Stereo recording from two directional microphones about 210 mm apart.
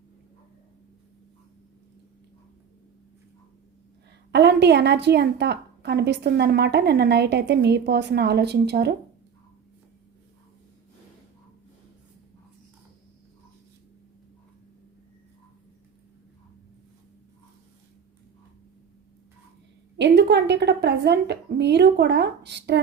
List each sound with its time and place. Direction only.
4.3 s a woman's voice: 55° right (ahead or behind)
20.0 s a woman's voice: 55° right (ahead or behind)